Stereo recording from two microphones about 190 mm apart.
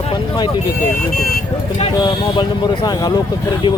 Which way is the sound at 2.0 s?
25° left (ahead or behind).